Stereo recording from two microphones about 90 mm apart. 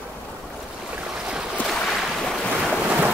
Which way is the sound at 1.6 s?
5° left (ahead or behind).